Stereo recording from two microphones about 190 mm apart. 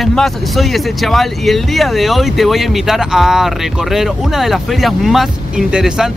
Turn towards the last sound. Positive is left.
turn(degrees=-5)  # may be behind; listen again after turning